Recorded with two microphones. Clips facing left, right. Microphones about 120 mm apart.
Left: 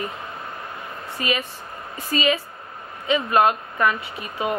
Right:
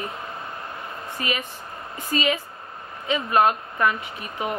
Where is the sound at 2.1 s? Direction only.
15° left (ahead or behind).